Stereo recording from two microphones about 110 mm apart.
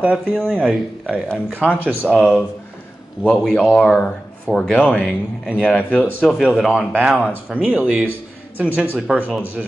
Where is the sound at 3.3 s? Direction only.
5° left (ahead or behind).